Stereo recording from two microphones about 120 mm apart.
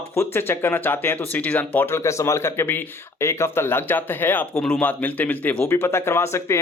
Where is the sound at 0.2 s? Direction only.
20° left (ahead or behind).